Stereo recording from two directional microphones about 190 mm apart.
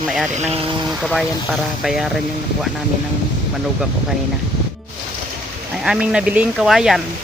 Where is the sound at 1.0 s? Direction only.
Centre (ahead or behind).